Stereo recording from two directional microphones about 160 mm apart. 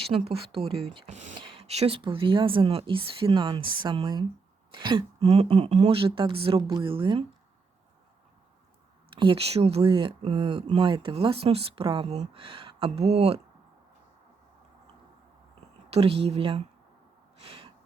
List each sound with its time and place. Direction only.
0.1 s speech: 35° right (ahead or behind)
0.9 s speech: 45° right (ahead or behind); by 4.3 s 25° right (ahead or behind)
4.7 s a sound: 30° right (ahead or behind)
5.2 s speech: 40° right (ahead or behind)
9.1 s speech: 35° right (ahead or behind)
15.9 s speech: 40° right (ahead or behind)
17.4 s a sound: 35° right (ahead or behind)